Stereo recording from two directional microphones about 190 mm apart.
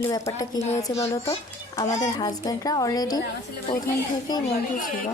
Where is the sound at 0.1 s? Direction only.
20° left (ahead or behind).